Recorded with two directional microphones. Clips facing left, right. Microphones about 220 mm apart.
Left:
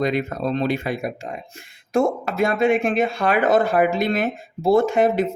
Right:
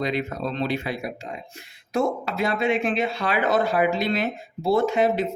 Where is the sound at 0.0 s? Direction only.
50° left (ahead or behind).